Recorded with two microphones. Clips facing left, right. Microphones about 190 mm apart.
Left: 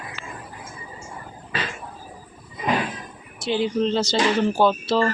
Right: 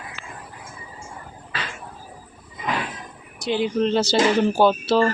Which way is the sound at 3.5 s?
5° right (ahead or behind).